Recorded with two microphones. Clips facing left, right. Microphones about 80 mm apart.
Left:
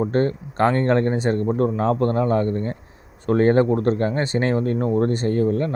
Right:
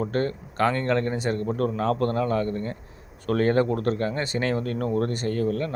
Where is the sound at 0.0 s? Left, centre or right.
Left.